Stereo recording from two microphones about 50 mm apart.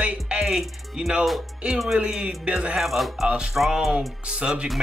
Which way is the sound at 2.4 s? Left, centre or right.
Centre.